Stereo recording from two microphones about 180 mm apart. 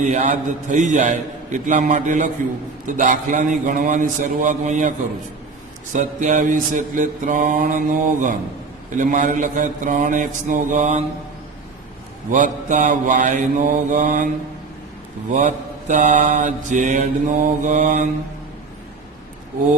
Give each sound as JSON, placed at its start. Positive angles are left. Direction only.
{"t": 0.0, "sound": "mantra", "side_deg": -40}
{"t": 6.0, "sound": "mantra", "side_deg": -45}
{"t": 12.3, "sound": "mantra", "side_deg": -45}
{"t": 15.3, "sound": "mantra", "side_deg": -45}